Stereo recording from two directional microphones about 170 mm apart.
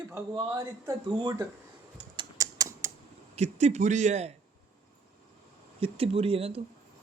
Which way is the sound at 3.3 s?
40° right (ahead or behind).